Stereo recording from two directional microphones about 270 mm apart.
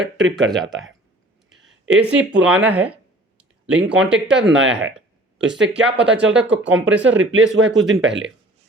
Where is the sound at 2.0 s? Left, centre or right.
Centre.